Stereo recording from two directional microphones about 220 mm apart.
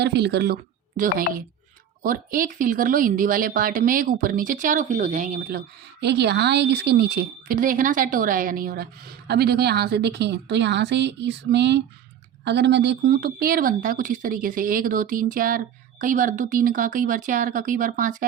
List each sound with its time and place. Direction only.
0.0 s speech: 50° right (ahead or behind)